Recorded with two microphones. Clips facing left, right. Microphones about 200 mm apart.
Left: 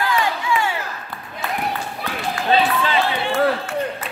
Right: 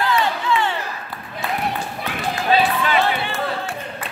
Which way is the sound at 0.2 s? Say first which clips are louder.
Right 1 dB; 10° left (ahead or behind).